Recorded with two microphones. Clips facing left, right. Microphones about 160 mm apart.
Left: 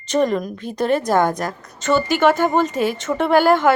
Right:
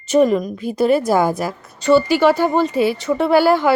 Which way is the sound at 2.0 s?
45° left (ahead or behind).